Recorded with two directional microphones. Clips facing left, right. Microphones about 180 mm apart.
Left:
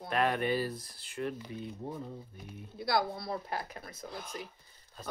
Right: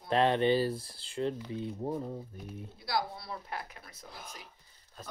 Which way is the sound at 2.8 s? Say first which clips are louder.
Left 3 dB; 60° left (ahead or behind).